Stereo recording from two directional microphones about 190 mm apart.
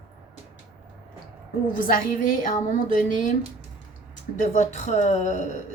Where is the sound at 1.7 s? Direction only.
45° left (ahead or behind).